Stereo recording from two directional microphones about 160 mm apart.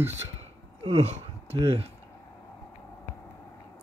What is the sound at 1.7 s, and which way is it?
Speech, 35° right (ahead or behind).